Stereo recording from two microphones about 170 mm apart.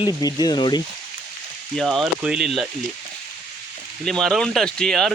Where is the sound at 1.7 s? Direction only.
Centre (ahead or behind).